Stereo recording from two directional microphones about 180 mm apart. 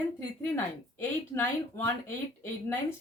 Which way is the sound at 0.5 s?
10° left (ahead or behind).